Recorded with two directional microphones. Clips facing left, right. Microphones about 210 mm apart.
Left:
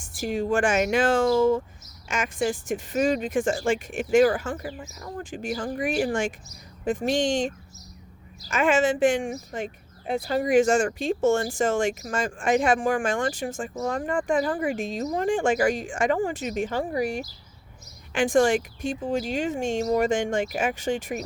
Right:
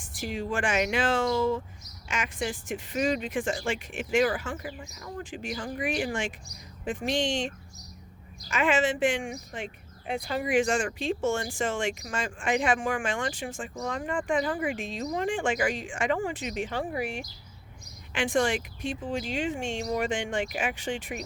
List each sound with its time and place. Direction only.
0.0 s speech: 45° left (ahead or behind)